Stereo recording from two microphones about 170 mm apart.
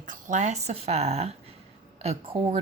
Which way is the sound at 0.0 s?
45° right (ahead or behind).